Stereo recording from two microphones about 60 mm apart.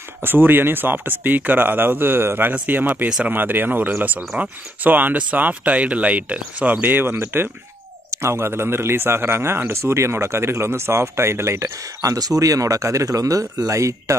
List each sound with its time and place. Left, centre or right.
0.2 s speech: right
12.0 s speech: right